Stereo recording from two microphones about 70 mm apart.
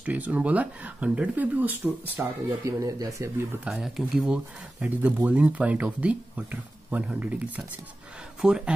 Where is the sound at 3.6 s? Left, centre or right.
Centre; by 7.6 s right.